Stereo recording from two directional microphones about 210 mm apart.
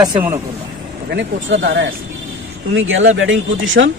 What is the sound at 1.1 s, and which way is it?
Speech, 55° right (ahead or behind).